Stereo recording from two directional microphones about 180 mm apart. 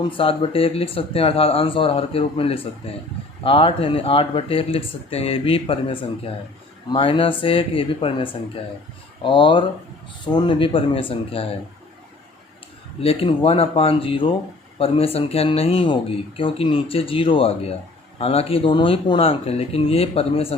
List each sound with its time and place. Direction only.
0.1 s speech: 30° left (ahead or behind)
13.0 s speech: 30° left (ahead or behind)